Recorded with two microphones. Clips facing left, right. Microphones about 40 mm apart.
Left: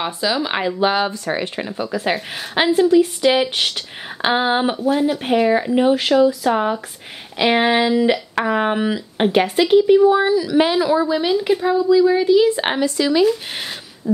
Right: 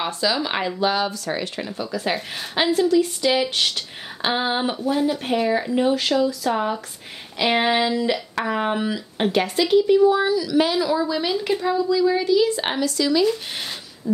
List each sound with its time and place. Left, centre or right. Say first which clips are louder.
0.0 s a woman's voice: left 2 dB; centre
0.7 s speech: left 4 dB; left
2.5 s a woman's voice: left 4 dB; centre
11.2 s a woman's voice: left 5 dB; centre; by 13.3 s left
14.0 s a sound: left 4 dB; left